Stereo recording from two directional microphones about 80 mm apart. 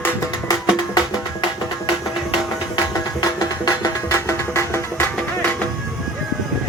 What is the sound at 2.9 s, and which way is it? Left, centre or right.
Music, left.